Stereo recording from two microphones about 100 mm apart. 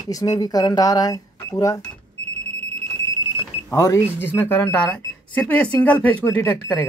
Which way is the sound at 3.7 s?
35° left (ahead or behind).